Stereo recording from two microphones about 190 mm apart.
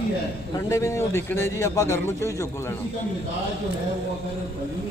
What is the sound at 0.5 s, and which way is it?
A man's voice, 15° left (ahead or behind).